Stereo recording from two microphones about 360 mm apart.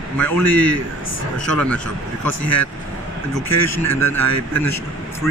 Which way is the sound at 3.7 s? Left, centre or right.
Centre.